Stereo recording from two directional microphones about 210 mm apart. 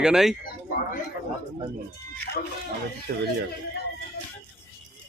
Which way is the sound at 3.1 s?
50° right (ahead or behind).